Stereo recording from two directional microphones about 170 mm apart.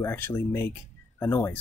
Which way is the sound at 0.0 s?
15° left (ahead or behind).